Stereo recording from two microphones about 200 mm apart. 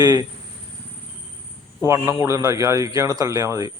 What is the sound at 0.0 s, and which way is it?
Speech, 15° right (ahead or behind).